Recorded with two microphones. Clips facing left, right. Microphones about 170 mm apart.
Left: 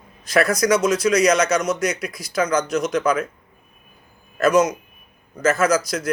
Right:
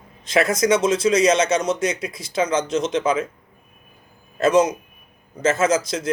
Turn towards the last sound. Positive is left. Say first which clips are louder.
# even
turn(degrees=-25)  # may be behind; listen again after turning